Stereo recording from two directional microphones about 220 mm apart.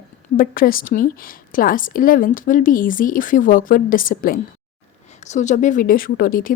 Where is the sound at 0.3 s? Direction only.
40° left (ahead or behind).